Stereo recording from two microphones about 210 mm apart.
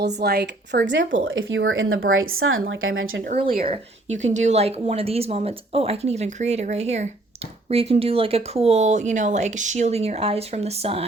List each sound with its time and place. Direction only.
0.2 s speech: 50° right (ahead or behind); by 3.2 s 70° right (ahead or behind)
3.3 s speech: 25° right (ahead or behind)